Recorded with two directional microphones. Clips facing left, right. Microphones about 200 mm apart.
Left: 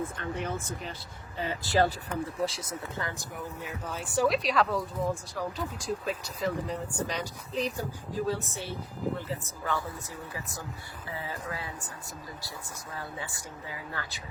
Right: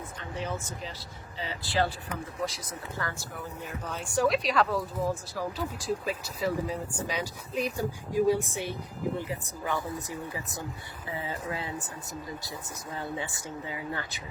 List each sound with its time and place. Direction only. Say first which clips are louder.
0.2 s speech: left 1 dB; 55° left (ahead or behind)
2.4 s speech: left 2 dB; 25° left (ahead or behind)
3.8 s speech: even; centre (ahead or behind); by 11.7 s 25° right (ahead or behind)
13.0 s speech: right 5 dB; 20° right (ahead or behind)